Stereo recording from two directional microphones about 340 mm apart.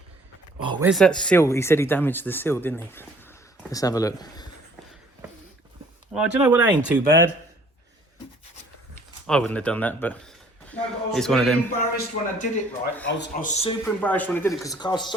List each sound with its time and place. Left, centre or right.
0.6 s a sound: centre
0.9 s speech: centre
6.1 s speech: centre
9.2 s speech: centre
11.8 s a man's voice: left
13.8 s speech: centre